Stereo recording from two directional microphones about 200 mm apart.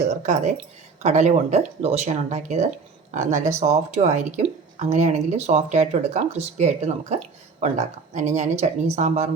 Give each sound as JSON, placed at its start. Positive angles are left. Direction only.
{"t": 0.1, "sound": "speech", "side_deg": -35}